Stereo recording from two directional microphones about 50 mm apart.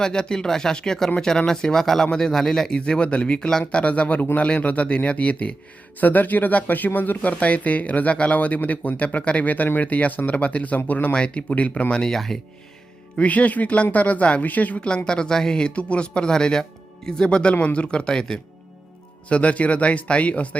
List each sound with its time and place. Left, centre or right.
0.0 s speech: centre
2.7 s speech: centre; by 11.1 s left
11.1 s speech: left
13.1 s speech: left
14.8 s speech: centre
19.3 s speech: left